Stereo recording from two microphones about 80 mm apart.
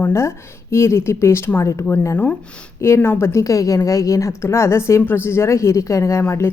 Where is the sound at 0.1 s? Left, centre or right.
Left.